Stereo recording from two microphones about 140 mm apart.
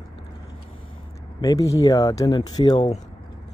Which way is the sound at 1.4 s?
25° left (ahead or behind).